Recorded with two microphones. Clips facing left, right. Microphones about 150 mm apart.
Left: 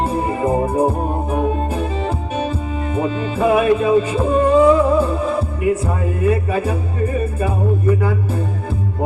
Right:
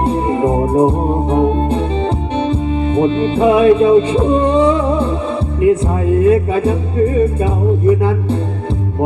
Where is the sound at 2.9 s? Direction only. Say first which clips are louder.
Right 6 dB; 25° right (ahead or behind).